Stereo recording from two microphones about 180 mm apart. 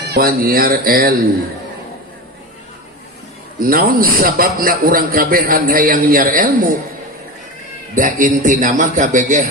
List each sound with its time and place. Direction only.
0.1 s speech: 55° right (ahead or behind)
3.6 s a man's voice: 50° right (ahead or behind)
7.9 s a man's voice: 45° right (ahead or behind)